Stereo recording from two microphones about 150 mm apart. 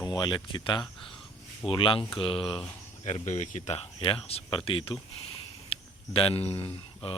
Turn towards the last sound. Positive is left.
turn(degrees=35)  # may be behind; listen again after turning